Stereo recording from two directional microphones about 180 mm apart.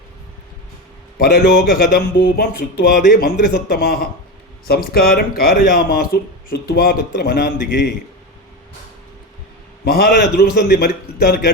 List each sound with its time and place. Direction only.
1.2 s a man's voice: 55° left (ahead or behind)
9.8 s a man's voice: 55° left (ahead or behind)